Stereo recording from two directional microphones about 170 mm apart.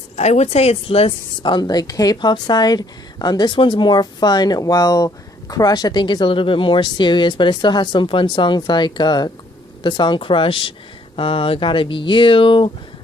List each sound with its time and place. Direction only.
0.2 s a woman's voice: 40° left (ahead or behind)